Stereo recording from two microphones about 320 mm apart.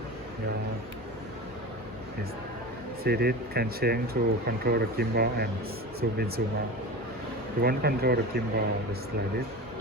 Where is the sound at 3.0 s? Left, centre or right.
Right.